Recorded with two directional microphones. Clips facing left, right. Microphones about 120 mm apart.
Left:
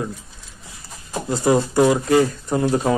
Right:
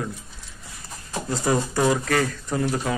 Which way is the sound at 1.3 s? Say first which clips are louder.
Left 6 dB; 20° left (ahead or behind).